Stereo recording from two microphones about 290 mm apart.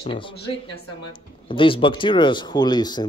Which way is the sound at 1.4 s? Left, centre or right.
Centre.